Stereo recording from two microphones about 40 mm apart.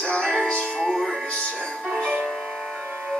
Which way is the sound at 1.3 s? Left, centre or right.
Left.